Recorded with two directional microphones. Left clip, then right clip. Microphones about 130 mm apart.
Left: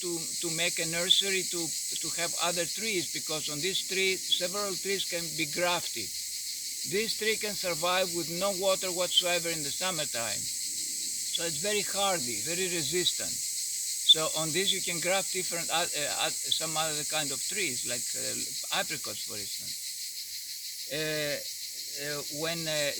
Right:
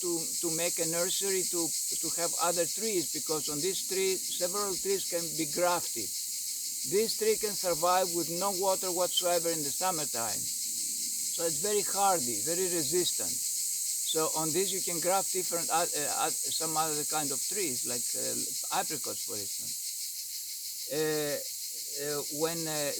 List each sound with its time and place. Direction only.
0.0 s speech: 35° right (ahead or behind)
6.9 s speech: 35° right (ahead or behind)
11.3 s speech: 35° right (ahead or behind)
14.1 s speech: 35° right (ahead or behind)
20.9 s speech: 35° right (ahead or behind)